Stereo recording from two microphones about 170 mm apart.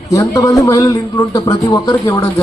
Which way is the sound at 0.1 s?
20° left (ahead or behind).